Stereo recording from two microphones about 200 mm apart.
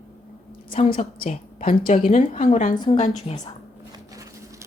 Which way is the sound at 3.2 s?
20° left (ahead or behind).